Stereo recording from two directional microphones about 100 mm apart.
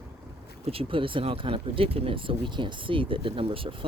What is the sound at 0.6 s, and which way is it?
Speech, 70° right (ahead or behind).